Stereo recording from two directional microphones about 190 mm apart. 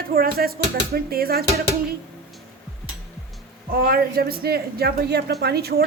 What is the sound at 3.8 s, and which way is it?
Speech, 55° right (ahead or behind).